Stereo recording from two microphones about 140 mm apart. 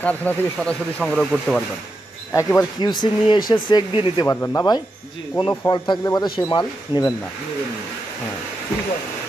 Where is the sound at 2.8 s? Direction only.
35° left (ahead or behind).